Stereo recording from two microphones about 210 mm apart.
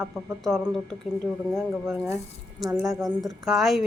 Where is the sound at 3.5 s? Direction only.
Centre (ahead or behind).